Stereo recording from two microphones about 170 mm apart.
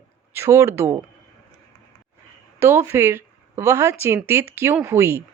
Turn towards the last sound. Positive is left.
turn(degrees=-15)  # may be behind; listen again after turning